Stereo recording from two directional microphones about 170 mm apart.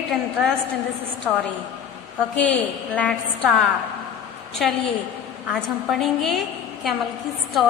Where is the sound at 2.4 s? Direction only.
10° left (ahead or behind).